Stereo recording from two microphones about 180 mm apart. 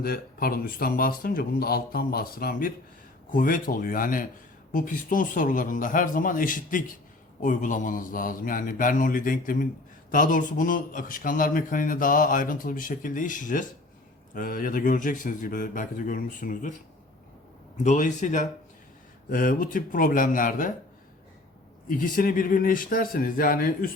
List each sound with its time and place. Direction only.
0.0 s a man's voice: 55° left (ahead or behind)
17.8 s a man's voice: 45° left (ahead or behind)
21.8 s a man's voice: 50° left (ahead or behind)